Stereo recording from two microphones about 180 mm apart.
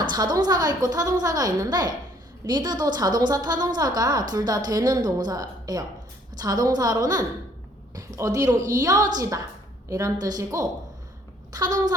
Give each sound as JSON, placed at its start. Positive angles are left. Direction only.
{"t": 0.0, "sound": "a woman's voice", "side_deg": -25}